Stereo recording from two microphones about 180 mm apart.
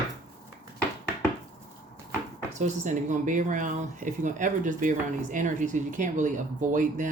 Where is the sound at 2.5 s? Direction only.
45° right (ahead or behind).